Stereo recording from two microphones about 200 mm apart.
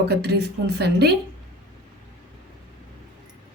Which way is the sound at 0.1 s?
55° right (ahead or behind).